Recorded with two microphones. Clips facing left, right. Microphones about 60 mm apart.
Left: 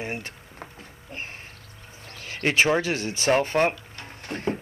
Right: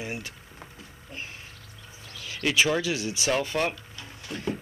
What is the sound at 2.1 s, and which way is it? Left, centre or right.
Speech, left.